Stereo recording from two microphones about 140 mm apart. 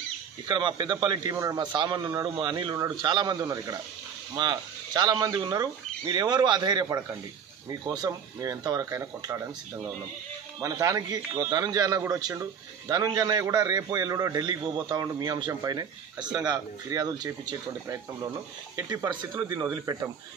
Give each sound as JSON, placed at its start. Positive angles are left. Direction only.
{"t": 0.5, "sound": "a man's voice", "side_deg": -35}
{"t": 10.6, "sound": "a man's voice", "side_deg": -25}